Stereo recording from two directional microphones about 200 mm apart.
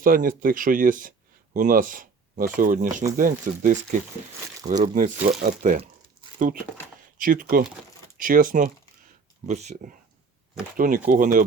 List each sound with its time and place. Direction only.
0.0 s speech: 45° right (ahead or behind)
7.2 s speech: 45° right (ahead or behind)